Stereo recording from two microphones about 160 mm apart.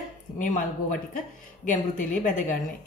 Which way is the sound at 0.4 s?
55° left (ahead or behind).